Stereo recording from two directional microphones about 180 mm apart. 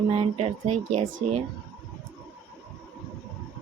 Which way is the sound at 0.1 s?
30° right (ahead or behind).